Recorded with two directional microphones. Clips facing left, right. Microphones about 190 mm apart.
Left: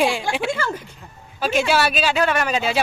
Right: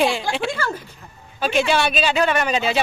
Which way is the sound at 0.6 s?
20° left (ahead or behind).